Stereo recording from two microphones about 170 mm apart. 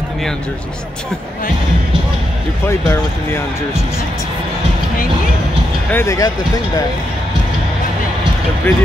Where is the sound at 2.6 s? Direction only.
15° left (ahead or behind).